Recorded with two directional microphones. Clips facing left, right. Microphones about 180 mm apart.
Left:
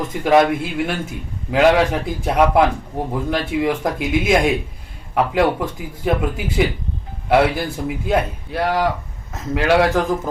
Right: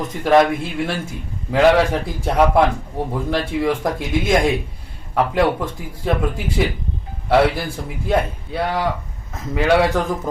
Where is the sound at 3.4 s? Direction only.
20° left (ahead or behind).